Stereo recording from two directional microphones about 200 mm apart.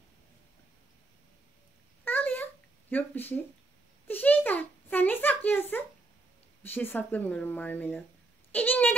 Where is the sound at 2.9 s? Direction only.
10° left (ahead or behind).